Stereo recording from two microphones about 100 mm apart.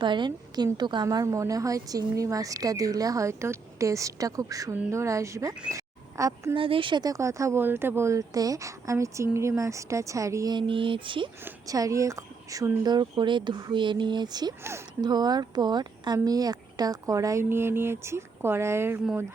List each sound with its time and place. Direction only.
0.0 s speech: 50° right (ahead or behind)
1.0 s speech: 30° right (ahead or behind)
5.7 s a sound: 30° right (ahead or behind)
6.5 s speech: 60° right (ahead or behind)
7.0 s speech: 30° right (ahead or behind)
10.5 s speech: 55° right (ahead or behind)
11.6 s speech: 35° right (ahead or behind)
14.6 s speech: 25° right (ahead or behind)
15.0 s speech: 45° right (ahead or behind); by 18.9 s 25° right (ahead or behind)